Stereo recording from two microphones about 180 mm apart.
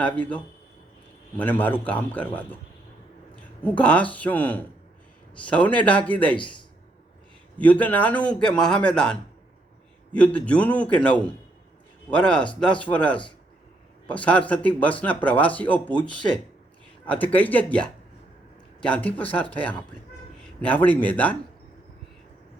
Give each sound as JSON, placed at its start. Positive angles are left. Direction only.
{"t": 0.0, "sound": "speech", "side_deg": 10}
{"t": 6.3, "sound": "speech", "side_deg": 25}
{"t": 7.6, "sound": "speech", "side_deg": 10}
{"t": 17.1, "sound": "a man's voice", "side_deg": 10}